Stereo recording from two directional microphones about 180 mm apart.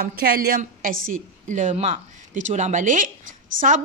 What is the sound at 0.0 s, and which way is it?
A woman's voice, 60° right (ahead or behind).